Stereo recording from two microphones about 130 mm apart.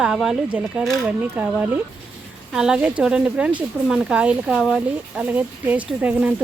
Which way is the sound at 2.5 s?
5° right (ahead or behind).